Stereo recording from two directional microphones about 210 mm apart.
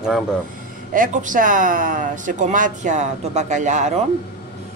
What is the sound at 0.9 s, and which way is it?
Speech, 40° right (ahead or behind).